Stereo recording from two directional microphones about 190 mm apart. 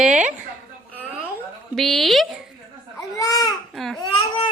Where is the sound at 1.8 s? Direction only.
Centre (ahead or behind).